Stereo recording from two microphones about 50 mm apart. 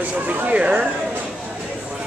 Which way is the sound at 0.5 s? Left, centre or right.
Right.